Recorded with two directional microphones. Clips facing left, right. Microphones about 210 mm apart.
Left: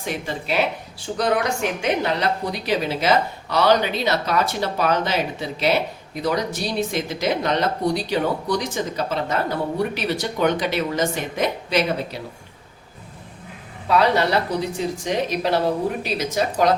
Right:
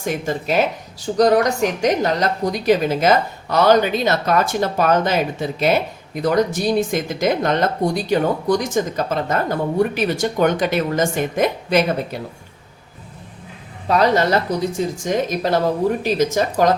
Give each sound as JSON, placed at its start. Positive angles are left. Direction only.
{"t": 0.0, "sound": "speech", "side_deg": -45}
{"t": 13.8, "sound": "speech", "side_deg": -45}